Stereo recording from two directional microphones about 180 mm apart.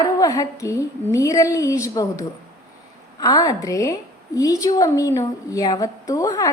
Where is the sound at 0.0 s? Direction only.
20° left (ahead or behind).